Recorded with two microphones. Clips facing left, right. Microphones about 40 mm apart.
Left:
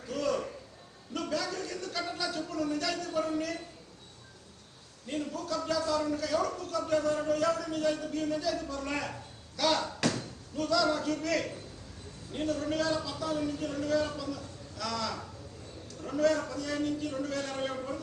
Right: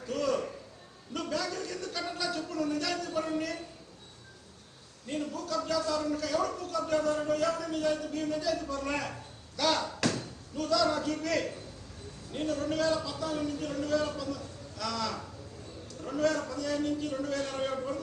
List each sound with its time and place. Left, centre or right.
0.1 s a sound: centre
1.8 s a man's voice: centre
5.0 s a man's voice: centre